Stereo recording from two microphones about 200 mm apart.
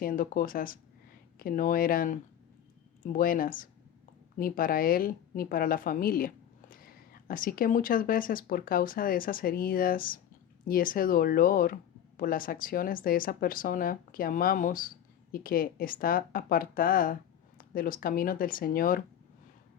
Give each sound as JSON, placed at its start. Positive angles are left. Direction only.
{"t": 0.0, "sound": "speech", "side_deg": 45}